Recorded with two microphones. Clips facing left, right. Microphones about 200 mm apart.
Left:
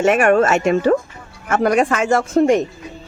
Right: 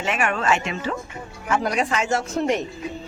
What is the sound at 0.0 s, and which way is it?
Speech, 50° left (ahead or behind).